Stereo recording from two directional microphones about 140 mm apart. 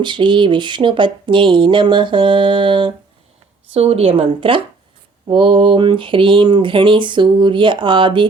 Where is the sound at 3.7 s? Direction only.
45° right (ahead or behind).